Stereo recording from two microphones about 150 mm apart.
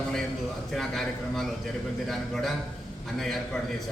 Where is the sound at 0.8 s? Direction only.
Centre (ahead or behind).